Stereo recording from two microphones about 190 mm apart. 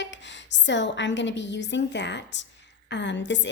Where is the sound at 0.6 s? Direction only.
70° left (ahead or behind).